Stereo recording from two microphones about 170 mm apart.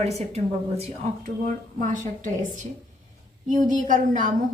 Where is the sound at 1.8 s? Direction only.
50° right (ahead or behind).